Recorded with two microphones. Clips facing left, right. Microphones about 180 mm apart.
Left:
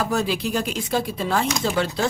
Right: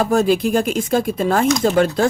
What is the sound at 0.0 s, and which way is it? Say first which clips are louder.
Speech: right 8 dB; 45° right (ahead or behind).